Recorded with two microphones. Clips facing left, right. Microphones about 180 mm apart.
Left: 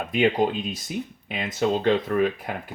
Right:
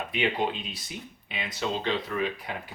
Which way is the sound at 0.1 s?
45° left (ahead or behind).